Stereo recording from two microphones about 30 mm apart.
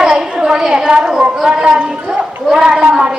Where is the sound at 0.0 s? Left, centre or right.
Right.